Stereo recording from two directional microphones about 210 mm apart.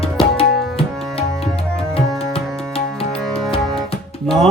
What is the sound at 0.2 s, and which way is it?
Tabla, 25° left (ahead or behind).